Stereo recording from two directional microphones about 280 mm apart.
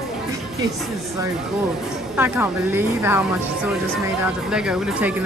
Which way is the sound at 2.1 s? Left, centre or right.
Centre.